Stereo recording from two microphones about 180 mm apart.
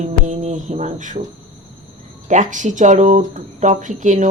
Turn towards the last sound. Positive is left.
turn(degrees=-45)  # may be behind; listen again after turning